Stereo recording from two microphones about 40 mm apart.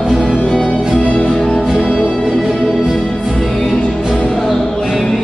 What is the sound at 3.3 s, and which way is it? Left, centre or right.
Music, centre.